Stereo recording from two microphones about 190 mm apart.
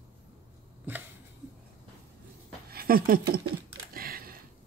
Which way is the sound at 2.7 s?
50° right (ahead or behind).